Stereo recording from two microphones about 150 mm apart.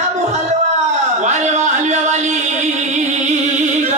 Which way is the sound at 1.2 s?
50° right (ahead or behind).